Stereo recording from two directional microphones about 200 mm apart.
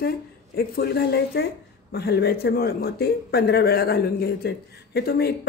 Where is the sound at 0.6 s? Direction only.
50° left (ahead or behind).